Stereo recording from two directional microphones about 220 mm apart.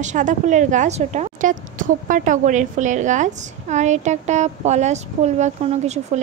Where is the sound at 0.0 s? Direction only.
35° right (ahead or behind).